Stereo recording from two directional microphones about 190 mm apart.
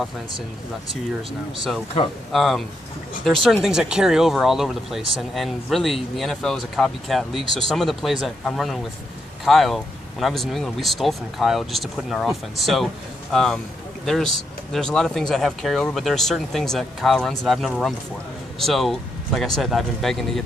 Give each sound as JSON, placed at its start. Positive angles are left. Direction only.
{"t": 2.3, "sound": "speech", "side_deg": 0}